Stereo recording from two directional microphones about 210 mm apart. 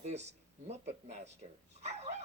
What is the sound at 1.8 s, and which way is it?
Dog, 30° right (ahead or behind).